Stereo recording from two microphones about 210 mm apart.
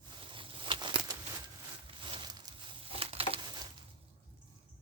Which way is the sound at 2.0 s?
25° right (ahead or behind).